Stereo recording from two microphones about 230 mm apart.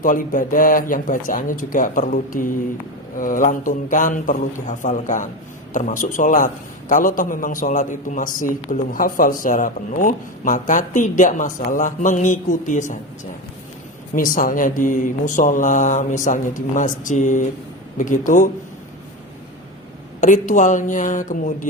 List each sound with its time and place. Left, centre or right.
0.0 s a man's voice: left
14.2 s a man's voice: left
20.2 s a man's voice: left